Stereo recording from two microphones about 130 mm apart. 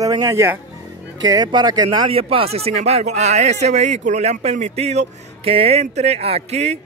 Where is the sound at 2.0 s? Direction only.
45° right (ahead or behind).